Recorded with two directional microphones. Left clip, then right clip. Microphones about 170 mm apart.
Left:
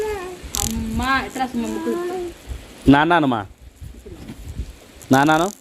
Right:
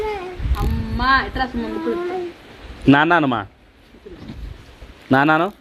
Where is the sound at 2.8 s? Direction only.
20° left (ahead or behind).